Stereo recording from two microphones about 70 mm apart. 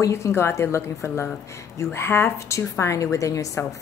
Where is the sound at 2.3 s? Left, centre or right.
Left.